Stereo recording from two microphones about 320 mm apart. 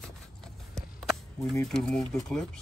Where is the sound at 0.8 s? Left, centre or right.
Centre.